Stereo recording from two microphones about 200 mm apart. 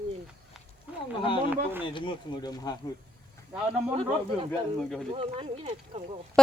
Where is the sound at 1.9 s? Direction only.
25° left (ahead or behind).